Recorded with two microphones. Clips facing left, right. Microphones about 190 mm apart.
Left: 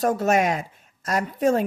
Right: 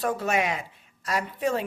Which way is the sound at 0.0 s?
45° left (ahead or behind).